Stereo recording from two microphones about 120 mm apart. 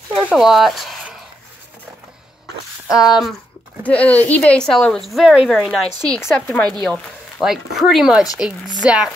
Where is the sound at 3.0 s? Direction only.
Centre (ahead or behind).